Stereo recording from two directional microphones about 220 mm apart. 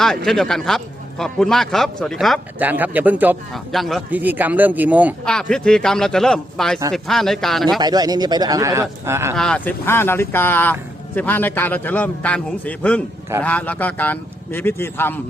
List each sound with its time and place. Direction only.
0.3 s a man's voice: centre (ahead or behind)
7.8 s speech: 20° right (ahead or behind)
9.3 s speech: 5° left (ahead or behind)